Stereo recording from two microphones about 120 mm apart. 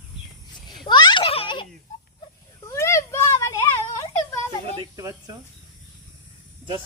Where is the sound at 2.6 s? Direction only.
25° left (ahead or behind).